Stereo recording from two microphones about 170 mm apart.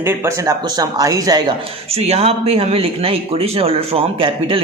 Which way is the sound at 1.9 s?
35° right (ahead or behind).